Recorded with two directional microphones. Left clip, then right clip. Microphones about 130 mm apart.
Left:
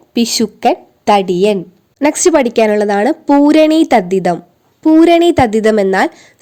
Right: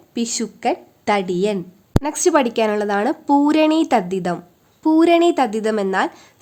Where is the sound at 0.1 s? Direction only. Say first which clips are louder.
Left 10 dB; 45° left (ahead or behind).